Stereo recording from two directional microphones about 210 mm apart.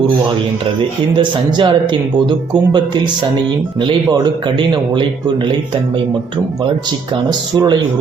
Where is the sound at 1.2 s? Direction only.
25° right (ahead or behind).